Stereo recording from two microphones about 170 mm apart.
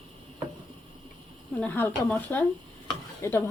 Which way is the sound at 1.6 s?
10° left (ahead or behind).